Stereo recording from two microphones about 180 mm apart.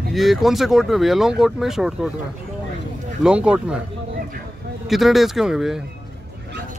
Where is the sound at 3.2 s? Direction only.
5° right (ahead or behind).